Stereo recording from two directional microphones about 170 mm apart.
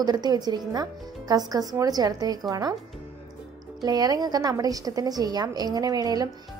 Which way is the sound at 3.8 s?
25° right (ahead or behind).